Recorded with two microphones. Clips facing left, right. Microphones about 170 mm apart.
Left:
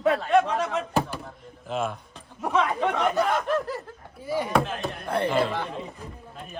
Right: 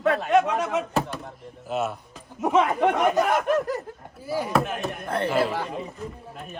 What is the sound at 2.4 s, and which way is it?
Speech, 20° right (ahead or behind).